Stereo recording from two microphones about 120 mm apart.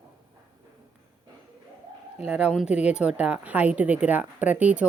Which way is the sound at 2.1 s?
10° right (ahead or behind).